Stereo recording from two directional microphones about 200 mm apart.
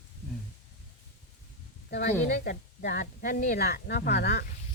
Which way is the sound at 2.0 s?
40° left (ahead or behind).